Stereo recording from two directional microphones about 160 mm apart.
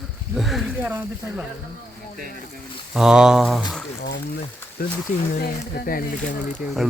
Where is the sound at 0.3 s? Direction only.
Centre (ahead or behind).